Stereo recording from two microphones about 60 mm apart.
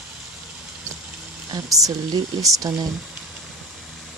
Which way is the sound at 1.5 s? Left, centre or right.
Right.